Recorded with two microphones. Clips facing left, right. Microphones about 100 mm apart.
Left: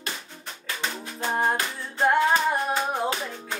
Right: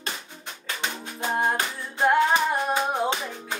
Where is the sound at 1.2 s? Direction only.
5° right (ahead or behind).